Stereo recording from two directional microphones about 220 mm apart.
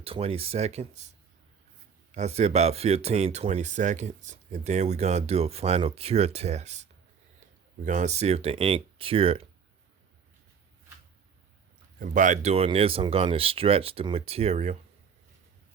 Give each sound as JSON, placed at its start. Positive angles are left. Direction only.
{"t": 0.0, "sound": "speech", "side_deg": -25}
{"t": 2.1, "sound": "speech", "side_deg": -30}
{"t": 7.9, "sound": "speech", "side_deg": -30}
{"t": 11.9, "sound": "speech", "side_deg": -35}